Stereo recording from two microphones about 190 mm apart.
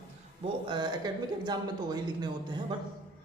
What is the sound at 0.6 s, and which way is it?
Speech, 25° right (ahead or behind).